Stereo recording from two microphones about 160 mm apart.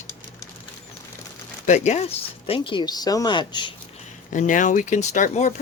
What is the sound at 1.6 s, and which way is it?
Speech, 45° left (ahead or behind).